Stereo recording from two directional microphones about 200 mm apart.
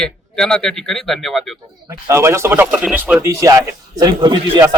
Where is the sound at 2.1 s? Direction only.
15° right (ahead or behind).